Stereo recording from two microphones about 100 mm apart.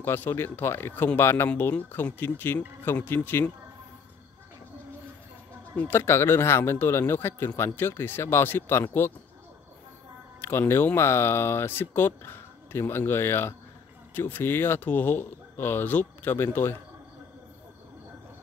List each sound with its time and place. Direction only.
0.0 s speech: 20° left (ahead or behind)
5.8 s speech: 25° left (ahead or behind)
10.4 s speech: 20° left (ahead or behind)